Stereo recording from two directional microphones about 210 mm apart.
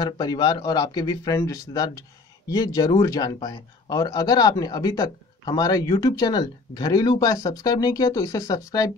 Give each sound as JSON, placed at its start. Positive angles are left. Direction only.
{"t": 0.0, "sound": "a man's voice", "side_deg": 20}